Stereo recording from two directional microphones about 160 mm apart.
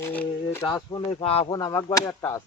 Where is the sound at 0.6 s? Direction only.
30° left (ahead or behind).